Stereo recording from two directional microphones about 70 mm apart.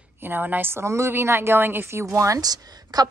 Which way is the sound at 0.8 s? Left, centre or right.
Right.